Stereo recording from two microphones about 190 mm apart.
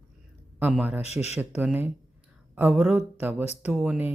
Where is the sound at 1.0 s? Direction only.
35° left (ahead or behind).